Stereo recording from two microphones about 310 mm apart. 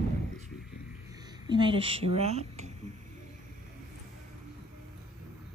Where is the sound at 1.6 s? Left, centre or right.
Centre.